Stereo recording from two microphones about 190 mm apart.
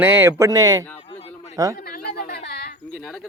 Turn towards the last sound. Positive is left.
turn(degrees=0)  # may be behind; listen again after turning